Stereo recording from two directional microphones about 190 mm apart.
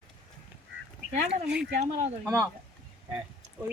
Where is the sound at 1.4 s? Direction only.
5° right (ahead or behind).